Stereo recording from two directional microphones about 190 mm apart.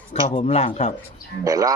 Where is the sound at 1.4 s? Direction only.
20° right (ahead or behind).